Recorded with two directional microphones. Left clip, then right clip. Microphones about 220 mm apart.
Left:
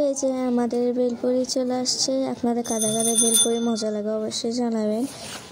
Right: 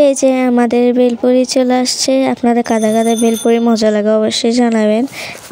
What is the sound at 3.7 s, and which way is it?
Speech, 55° right (ahead or behind).